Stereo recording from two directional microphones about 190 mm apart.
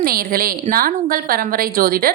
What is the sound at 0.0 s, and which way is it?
A woman's voice, 50° right (ahead or behind).